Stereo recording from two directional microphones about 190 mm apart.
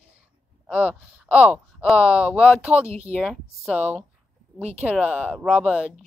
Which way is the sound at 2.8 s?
35° right (ahead or behind).